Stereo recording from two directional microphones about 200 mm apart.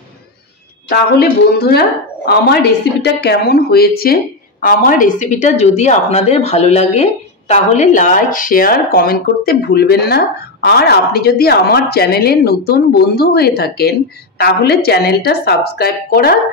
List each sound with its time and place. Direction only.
0.8 s a woman's voice: 55° left (ahead or behind)